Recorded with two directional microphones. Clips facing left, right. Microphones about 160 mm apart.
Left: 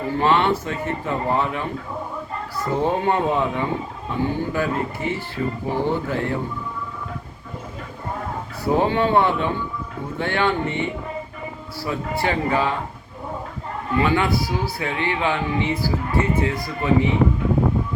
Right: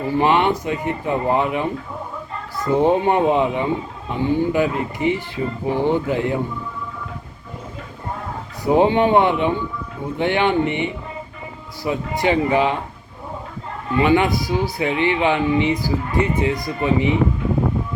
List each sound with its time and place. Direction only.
0.1 s speech: 15° right (ahead or behind)
2.8 s speech: 15° right (ahead or behind)
8.6 s speech: 15° right (ahead or behind)
14.0 s speech: 15° right (ahead or behind)